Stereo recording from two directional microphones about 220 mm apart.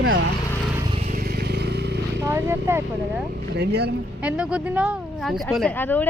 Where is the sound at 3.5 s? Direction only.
50° right (ahead or behind).